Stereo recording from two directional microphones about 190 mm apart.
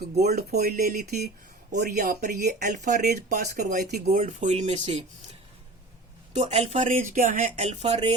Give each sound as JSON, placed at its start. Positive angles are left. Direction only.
{"t": 0.2, "sound": "speech", "side_deg": -55}
{"t": 3.2, "sound": "speech", "side_deg": -55}
{"t": 3.7, "sound": "speech", "side_deg": -40}